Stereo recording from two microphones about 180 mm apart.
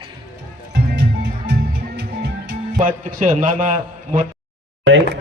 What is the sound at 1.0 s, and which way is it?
Music, 65° right (ahead or behind).